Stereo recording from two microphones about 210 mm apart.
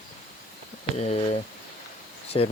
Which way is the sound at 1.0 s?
30° left (ahead or behind).